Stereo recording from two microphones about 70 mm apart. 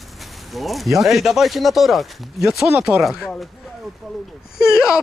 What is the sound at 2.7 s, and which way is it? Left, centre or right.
Speech, centre.